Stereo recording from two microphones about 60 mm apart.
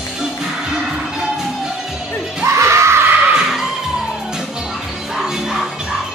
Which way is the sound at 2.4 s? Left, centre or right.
Right.